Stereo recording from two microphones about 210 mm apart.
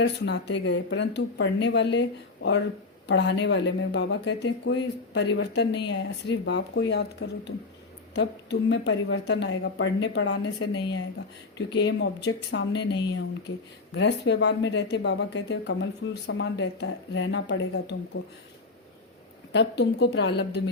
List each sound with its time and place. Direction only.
0.0 s speech: 55° left (ahead or behind); by 10.7 s 75° left (ahead or behind)
11.8 s speech: 55° left (ahead or behind)
19.5 s a woman's voice: 55° left (ahead or behind)